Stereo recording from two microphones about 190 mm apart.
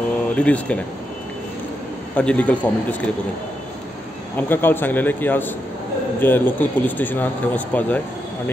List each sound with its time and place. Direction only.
0.4 s speech: 5° left (ahead or behind)
2.1 s speech: 5° left (ahead or behind)
4.4 s speech: 10° left (ahead or behind)